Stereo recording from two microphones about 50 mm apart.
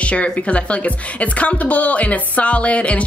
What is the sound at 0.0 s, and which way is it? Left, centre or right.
A woman's voice, left.